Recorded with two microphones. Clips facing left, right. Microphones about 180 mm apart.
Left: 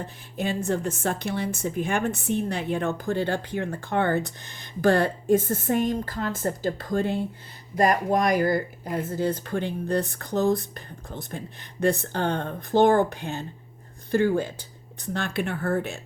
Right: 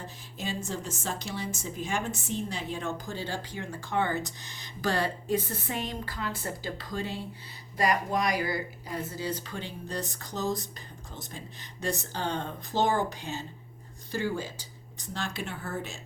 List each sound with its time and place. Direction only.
0.0 s a woman's voice: 60° left (ahead or behind)